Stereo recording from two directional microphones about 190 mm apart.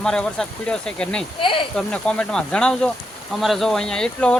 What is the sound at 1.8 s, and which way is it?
Speech, 5° left (ahead or behind).